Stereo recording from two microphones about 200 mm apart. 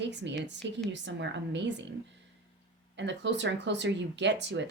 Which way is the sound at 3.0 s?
65° right (ahead or behind).